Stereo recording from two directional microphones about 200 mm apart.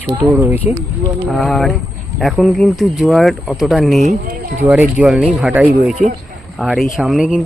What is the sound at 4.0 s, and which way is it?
Speech, 35° right (ahead or behind).